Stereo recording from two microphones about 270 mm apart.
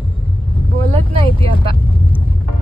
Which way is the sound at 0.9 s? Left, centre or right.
Centre.